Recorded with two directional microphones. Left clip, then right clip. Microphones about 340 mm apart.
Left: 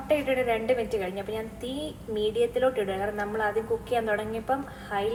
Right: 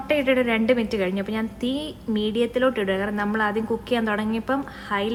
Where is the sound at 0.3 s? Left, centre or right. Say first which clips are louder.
Right 5 dB; right.